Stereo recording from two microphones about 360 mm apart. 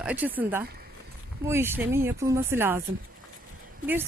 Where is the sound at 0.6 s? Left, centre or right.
Right.